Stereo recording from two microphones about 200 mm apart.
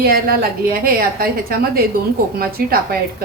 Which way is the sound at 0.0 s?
50° right (ahead or behind).